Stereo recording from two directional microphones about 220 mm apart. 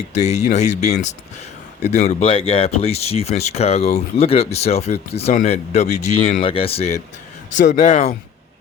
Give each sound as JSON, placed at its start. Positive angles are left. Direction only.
{"t": 0.1, "sound": "speech", "side_deg": 30}